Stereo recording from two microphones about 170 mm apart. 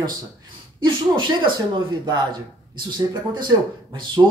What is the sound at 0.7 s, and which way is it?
Speech, 30° right (ahead or behind).